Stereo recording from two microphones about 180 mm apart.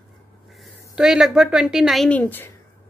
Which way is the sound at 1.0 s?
5° right (ahead or behind).